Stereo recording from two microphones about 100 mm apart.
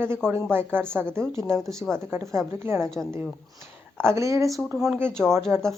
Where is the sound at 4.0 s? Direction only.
30° right (ahead or behind).